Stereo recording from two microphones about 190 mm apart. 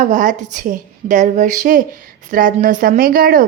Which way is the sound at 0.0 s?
40° right (ahead or behind).